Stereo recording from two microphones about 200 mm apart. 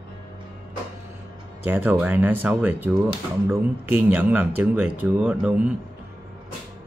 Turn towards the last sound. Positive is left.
turn(degrees=-5)  # may be behind; listen again after turning